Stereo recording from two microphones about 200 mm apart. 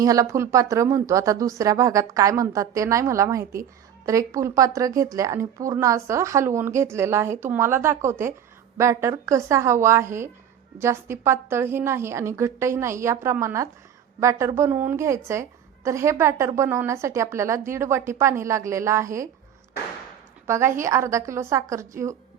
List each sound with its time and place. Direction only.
0.0 s speech: 15° right (ahead or behind)
20.5 s speech: 15° right (ahead or behind)